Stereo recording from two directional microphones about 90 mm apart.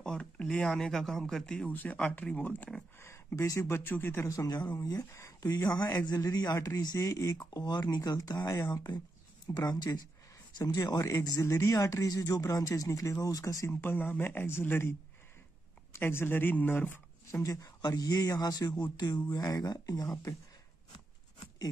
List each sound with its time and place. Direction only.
0.0 s speech: 10° left (ahead or behind)
1.7 s speech: 20° left (ahead or behind)
3.0 s speech: 30° left (ahead or behind)
4.3 s speech: 45° left (ahead or behind)
5.9 s speech: 45° left (ahead or behind)
7.5 s speech: 50° left (ahead or behind)
13.7 s speech: 20° left (ahead or behind)
17.4 s speech: 40° left (ahead or behind)